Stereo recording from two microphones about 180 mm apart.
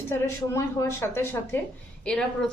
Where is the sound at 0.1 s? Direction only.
15° left (ahead or behind).